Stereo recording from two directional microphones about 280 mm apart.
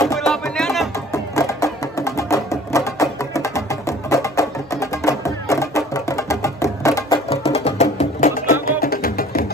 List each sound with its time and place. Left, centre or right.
0.2 s music: centre; by 9.5 s left